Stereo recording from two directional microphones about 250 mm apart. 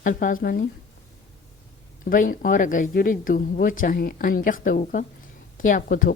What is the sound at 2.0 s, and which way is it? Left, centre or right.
Speech, left.